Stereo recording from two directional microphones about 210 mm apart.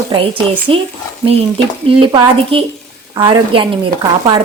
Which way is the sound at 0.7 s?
25° right (ahead or behind).